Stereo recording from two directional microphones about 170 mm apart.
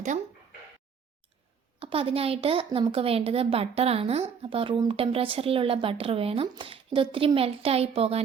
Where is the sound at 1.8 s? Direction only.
35° right (ahead or behind).